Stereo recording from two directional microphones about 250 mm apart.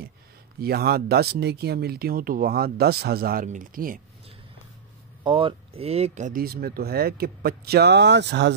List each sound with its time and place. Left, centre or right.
0.6 s speech: right
5.2 s speech: right